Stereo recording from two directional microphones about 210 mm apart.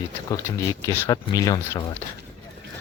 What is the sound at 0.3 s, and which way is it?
Speech, 15° left (ahead or behind).